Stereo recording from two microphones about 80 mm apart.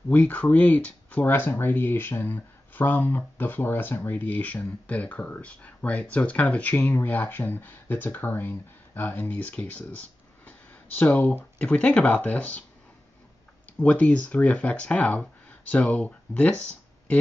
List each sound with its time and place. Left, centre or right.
0.1 s speech: centre
13.7 s speech: centre